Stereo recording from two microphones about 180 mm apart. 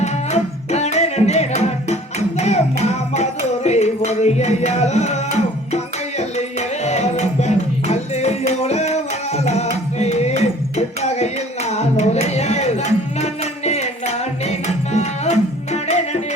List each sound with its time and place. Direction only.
0.0 s music: 35° left (ahead or behind)